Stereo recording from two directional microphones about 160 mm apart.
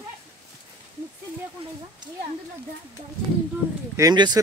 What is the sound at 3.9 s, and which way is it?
Speech, 25° right (ahead or behind).